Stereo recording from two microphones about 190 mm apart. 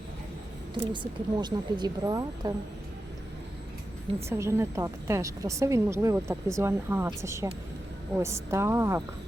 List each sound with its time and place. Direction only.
1.4 s speech: 20° right (ahead or behind)
4.3 s a woman's voice: 15° right (ahead or behind)